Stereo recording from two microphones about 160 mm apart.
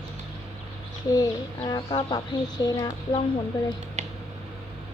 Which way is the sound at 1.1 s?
25° left (ahead or behind).